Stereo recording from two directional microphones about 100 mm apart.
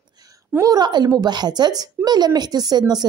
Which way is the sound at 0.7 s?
45° right (ahead or behind).